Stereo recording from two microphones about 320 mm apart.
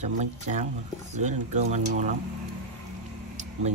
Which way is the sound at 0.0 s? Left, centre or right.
Right.